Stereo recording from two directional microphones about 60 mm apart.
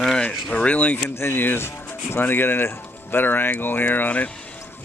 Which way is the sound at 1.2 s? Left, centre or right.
Left.